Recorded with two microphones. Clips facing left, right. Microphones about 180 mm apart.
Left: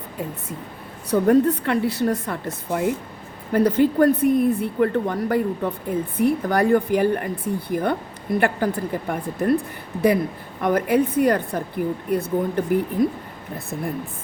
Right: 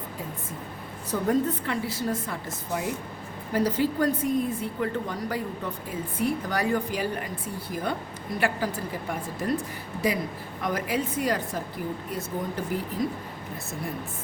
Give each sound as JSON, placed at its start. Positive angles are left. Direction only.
{"t": 1.1, "sound": "speech", "side_deg": 65}